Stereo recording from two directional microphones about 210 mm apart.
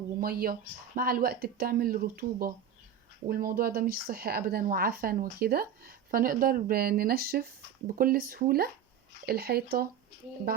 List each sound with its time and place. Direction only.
0.2 s speech: 45° right (ahead or behind)